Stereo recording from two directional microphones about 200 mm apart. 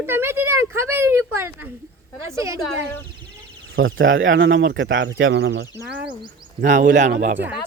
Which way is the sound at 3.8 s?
75° right (ahead or behind).